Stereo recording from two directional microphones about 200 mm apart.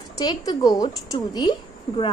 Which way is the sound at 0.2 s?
20° left (ahead or behind).